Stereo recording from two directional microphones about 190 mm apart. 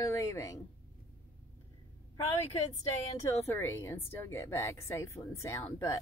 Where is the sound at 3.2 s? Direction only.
15° left (ahead or behind).